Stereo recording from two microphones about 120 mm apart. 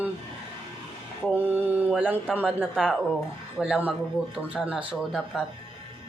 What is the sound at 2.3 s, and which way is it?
Speech, 15° right (ahead or behind).